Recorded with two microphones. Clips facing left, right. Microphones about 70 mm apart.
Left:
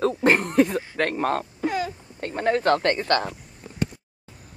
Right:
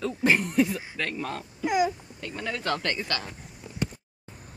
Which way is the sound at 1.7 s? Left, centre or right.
Centre.